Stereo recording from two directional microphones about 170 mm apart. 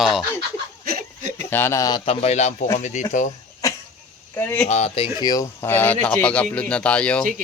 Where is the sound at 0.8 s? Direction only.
60° right (ahead or behind).